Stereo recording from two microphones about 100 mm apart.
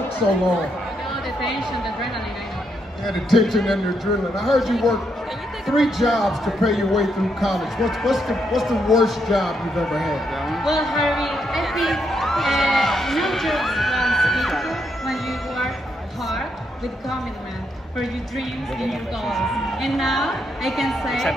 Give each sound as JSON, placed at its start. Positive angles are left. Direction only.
{"t": 3.1, "sound": "a woman's voice", "side_deg": 0}
{"t": 18.8, "sound": "a woman's voice", "side_deg": 0}